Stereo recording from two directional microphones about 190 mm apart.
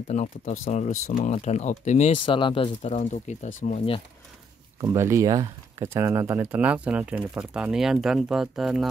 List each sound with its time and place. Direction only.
0.1 s speech: 35° left (ahead or behind)
2.2 s speech: 25° left (ahead or behind)
4.7 s speech: 15° right (ahead or behind)